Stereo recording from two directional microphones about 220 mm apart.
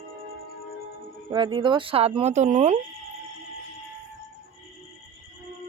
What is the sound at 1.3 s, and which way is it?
Speech, 20° right (ahead or behind).